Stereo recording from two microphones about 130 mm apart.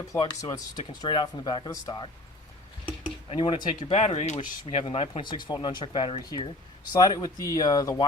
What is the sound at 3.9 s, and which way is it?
Speech, 55° left (ahead or behind).